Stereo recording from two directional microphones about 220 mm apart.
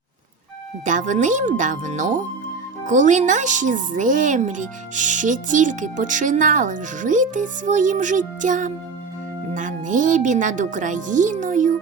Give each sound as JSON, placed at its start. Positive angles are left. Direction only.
{"t": 0.9, "sound": "speech", "side_deg": -35}